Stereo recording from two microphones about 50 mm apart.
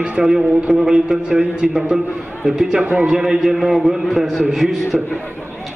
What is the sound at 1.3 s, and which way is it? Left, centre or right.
Speech, right.